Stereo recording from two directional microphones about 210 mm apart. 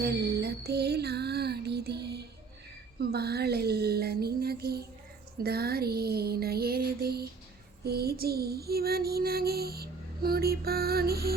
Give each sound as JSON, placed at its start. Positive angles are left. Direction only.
{"t": 0.0, "sound": "music", "side_deg": -50}
{"t": 3.0, "sound": "child singing", "side_deg": -50}
{"t": 5.4, "sound": "music", "side_deg": -50}
{"t": 7.9, "sound": "child singing", "side_deg": -50}